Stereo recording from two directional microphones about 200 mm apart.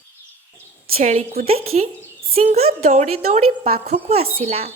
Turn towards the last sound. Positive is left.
turn(degrees=-30)  # may be behind; listen again after turning